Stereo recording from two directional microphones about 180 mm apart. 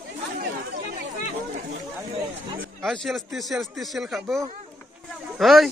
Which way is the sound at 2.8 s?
Centre (ahead or behind).